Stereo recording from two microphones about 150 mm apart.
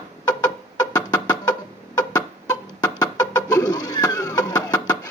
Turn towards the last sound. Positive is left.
turn(degrees=25)  # may be behind; listen again after turning